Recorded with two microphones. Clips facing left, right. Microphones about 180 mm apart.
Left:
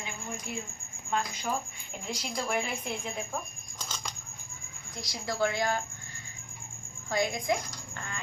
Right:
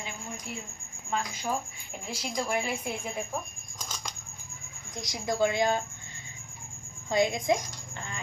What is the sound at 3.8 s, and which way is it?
Bird flight, 10° right (ahead or behind).